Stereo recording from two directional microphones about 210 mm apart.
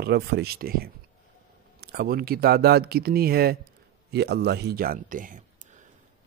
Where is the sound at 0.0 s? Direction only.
50° right (ahead or behind).